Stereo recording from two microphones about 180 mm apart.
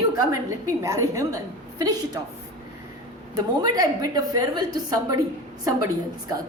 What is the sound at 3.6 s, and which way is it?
A woman's voice, 20° right (ahead or behind).